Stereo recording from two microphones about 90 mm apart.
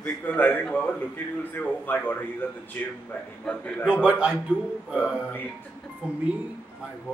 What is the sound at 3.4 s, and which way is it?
Speech, 10° left (ahead or behind).